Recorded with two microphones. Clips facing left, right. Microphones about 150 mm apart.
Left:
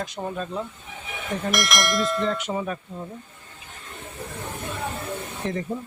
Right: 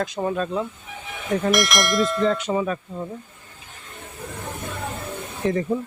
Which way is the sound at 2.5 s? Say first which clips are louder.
Right 5 dB; 90° right.